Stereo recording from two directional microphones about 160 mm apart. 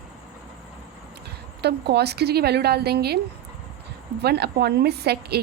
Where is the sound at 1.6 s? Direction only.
90° right.